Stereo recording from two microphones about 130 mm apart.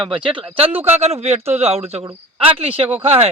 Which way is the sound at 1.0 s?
55° right (ahead or behind).